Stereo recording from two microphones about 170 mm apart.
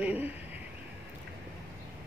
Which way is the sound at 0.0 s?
10° right (ahead or behind).